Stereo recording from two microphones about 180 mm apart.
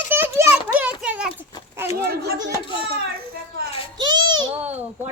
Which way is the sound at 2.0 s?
65° right (ahead or behind).